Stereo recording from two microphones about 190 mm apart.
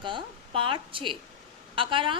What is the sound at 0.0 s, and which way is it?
A woman's voice, 25° right (ahead or behind).